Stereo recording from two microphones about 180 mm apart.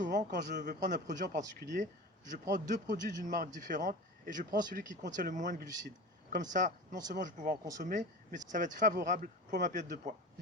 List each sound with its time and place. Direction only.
0.0 s speech: 45° right (ahead or behind)